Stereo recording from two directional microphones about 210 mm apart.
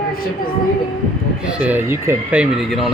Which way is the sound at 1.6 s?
10° right (ahead or behind).